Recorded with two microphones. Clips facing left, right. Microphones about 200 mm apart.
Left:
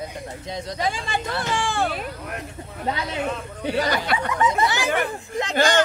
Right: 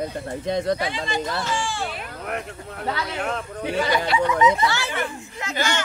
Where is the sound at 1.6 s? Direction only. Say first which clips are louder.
Left 4 dB; 60° left (ahead or behind).